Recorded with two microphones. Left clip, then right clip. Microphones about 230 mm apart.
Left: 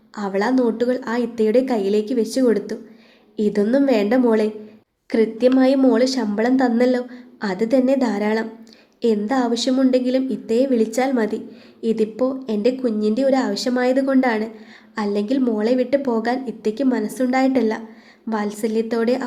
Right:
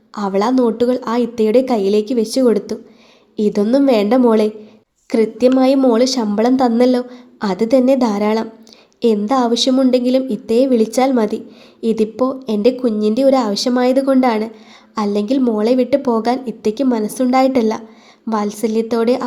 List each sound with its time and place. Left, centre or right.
0.1 s a woman's voice: right